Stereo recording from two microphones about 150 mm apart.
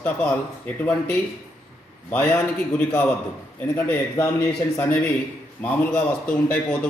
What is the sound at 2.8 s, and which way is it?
A man's voice, 15° left (ahead or behind).